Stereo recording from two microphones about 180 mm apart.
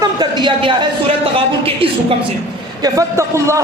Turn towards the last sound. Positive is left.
turn(degrees=-15)  # may be behind; listen again after turning